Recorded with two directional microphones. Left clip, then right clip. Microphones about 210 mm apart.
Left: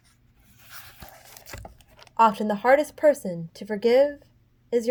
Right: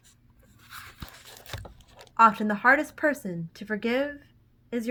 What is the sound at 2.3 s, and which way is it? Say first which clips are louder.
Speech: left 2 dB; 50° left (ahead or behind).